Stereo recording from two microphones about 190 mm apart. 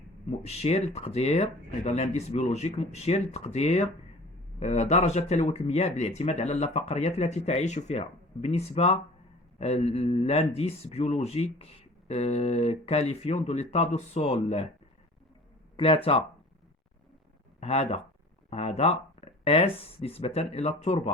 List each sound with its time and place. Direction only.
0.3 s speech: 35° left (ahead or behind)
15.7 s speech: 30° left (ahead or behind)
17.6 s speech: 30° left (ahead or behind)